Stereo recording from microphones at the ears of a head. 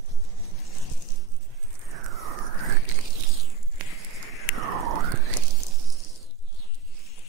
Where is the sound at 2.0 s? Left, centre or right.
Right.